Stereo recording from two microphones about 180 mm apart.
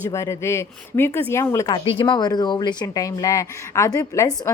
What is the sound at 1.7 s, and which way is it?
A woman's voice, 30° left (ahead or behind).